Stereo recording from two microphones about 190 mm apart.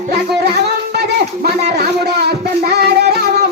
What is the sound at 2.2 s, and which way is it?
Music, 60° right (ahead or behind).